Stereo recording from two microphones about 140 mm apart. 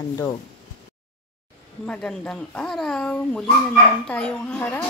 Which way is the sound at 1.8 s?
5° left (ahead or behind).